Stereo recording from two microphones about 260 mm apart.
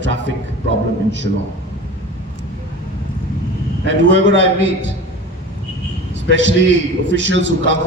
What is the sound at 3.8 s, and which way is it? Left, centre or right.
Speech, right.